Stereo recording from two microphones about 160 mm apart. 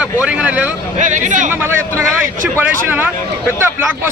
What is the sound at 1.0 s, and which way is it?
Speech, 50° right (ahead or behind).